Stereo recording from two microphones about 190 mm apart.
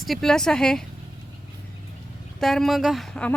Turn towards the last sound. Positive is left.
turn(degrees=5)  # may be behind; listen again after turning